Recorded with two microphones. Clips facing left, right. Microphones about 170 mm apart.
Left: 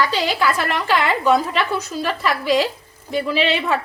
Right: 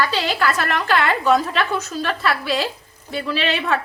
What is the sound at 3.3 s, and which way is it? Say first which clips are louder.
Speech: left 3 dB; 40° right (ahead or behind).